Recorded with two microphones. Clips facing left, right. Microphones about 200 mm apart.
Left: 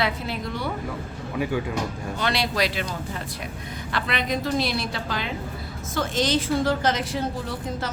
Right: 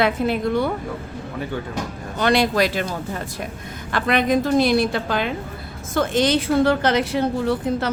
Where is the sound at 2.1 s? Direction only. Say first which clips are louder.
Right 8 dB; 50° right (ahead or behind).